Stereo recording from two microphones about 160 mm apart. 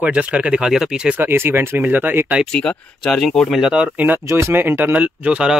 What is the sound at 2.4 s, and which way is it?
Speech, 5° left (ahead or behind).